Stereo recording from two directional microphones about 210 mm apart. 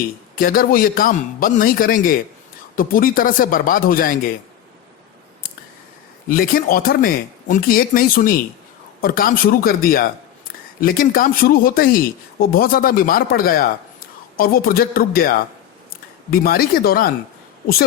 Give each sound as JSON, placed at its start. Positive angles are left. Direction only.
{"t": 0.3, "sound": "a man's voice", "side_deg": 40}
{"t": 6.2, "sound": "speech", "side_deg": 40}
{"t": 16.3, "sound": "speech", "side_deg": 45}